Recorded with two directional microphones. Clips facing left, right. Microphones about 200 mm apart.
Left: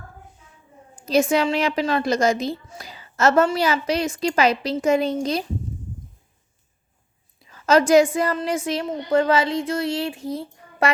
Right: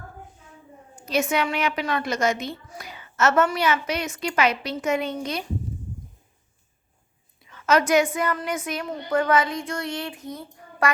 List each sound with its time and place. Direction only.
1.0 s a woman's voice: 35° left (ahead or behind)
7.4 s a woman's voice: 30° left (ahead or behind)